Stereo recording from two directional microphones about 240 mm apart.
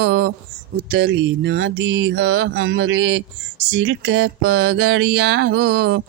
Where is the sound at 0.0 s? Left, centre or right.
Right.